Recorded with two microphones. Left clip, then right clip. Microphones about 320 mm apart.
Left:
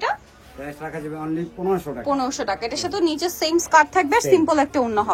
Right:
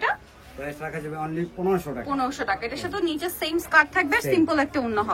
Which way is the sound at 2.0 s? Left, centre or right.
Centre.